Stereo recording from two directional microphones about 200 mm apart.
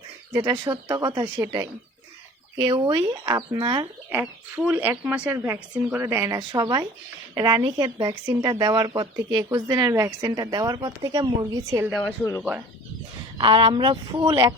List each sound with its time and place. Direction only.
0.3 s speech: 20° right (ahead or behind)
4.1 s speech: 10° right (ahead or behind)
13.4 s speech: 25° right (ahead or behind)